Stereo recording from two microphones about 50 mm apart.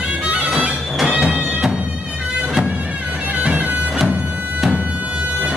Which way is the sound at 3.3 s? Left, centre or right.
Right.